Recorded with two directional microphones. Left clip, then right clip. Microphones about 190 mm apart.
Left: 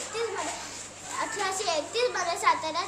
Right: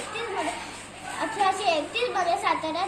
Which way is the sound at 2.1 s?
20° left (ahead or behind).